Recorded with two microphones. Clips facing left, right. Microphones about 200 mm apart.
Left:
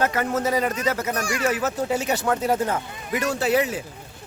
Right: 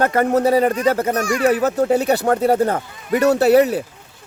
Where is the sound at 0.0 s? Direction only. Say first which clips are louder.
Right 6 dB; 50° right (ahead or behind).